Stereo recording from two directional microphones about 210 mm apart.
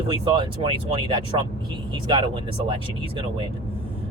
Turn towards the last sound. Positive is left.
turn(degrees=-20)  # may be behind; listen again after turning